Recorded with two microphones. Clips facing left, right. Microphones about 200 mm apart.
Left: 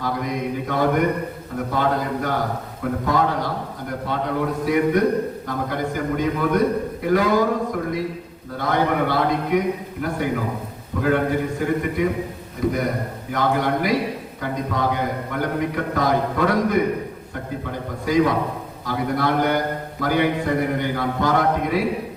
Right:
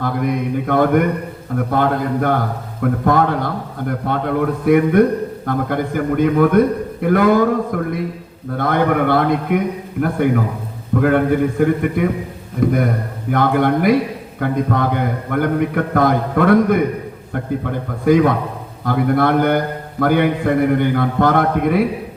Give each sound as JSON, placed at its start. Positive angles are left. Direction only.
{"t": 0.0, "sound": "a man's voice", "side_deg": -55}